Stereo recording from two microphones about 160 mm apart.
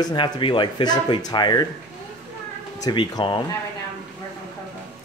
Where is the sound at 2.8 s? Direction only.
25° left (ahead or behind).